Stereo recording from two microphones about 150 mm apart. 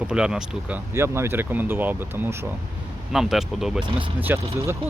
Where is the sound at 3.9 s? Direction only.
35° right (ahead or behind).